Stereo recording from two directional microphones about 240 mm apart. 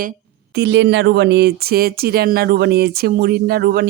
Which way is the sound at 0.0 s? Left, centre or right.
Right.